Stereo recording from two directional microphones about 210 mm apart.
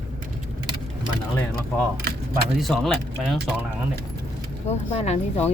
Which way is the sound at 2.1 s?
50° right (ahead or behind).